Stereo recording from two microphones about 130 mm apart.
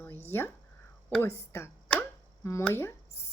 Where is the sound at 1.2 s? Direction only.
20° left (ahead or behind).